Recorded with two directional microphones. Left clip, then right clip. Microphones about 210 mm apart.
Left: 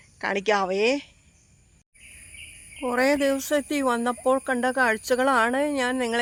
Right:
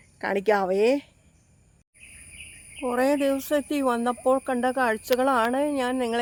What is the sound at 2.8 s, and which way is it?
Speech, 10° left (ahead or behind).